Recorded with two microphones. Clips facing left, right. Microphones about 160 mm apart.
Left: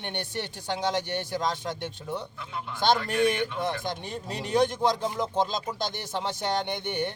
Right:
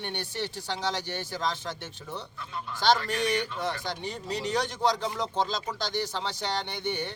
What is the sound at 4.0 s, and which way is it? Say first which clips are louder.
Speech: right 2 dB; 55° left (ahead or behind).